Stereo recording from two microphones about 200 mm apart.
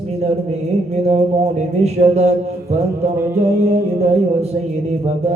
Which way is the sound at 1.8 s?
30° right (ahead or behind).